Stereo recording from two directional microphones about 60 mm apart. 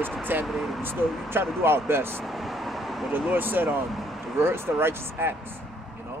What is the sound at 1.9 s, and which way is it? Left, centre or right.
Speech, right.